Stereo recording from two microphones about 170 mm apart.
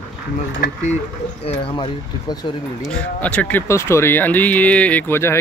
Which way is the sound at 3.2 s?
10° left (ahead or behind).